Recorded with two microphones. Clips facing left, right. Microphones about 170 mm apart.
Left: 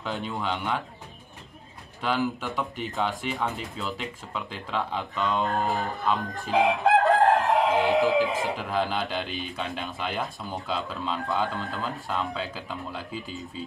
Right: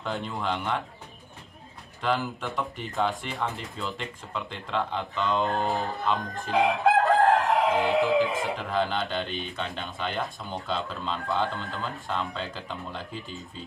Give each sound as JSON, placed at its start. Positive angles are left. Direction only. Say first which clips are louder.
{"t": 0.0, "sound": "speech", "louder": "even", "side_deg": 0}
{"t": 2.0, "sound": "speech", "louder": "left 1 dB", "side_deg": 0}
{"t": 6.7, "sound": "chicken", "louder": "left 2 dB", "side_deg": 20}
{"t": 7.0, "sound": "crowing", "louder": "left 1 dB", "side_deg": 0}
{"t": 7.3, "sound": "chicken", "louder": "left 1 dB", "side_deg": 20}
{"t": 7.7, "sound": "speech", "louder": "left 1 dB", "side_deg": 0}